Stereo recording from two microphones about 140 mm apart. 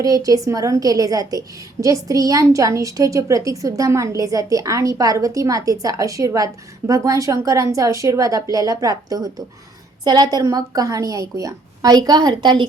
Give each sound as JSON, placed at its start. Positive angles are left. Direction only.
{"t": 0.0, "sound": "a woman's voice", "side_deg": -25}